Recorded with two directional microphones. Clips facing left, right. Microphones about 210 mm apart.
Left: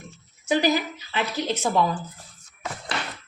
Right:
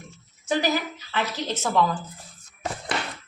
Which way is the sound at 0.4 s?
15° left (ahead or behind).